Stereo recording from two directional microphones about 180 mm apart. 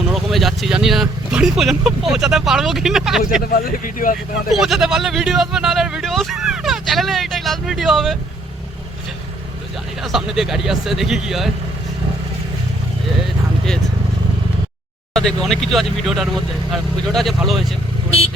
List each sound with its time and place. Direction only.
0.1 s speech: centre (ahead or behind)
3.4 s speech: 55° left (ahead or behind)
4.4 s speech: centre (ahead or behind)
10.0 s speech: centre (ahead or behind)
15.1 s speech: 5° left (ahead or behind)